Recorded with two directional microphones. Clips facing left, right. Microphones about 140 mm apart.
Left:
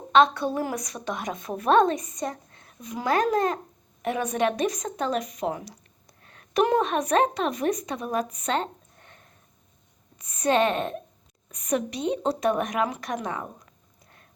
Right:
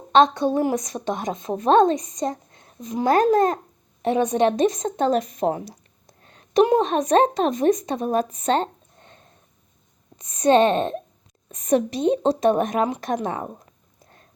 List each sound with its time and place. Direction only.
0.1 s a woman's voice: 25° right (ahead or behind)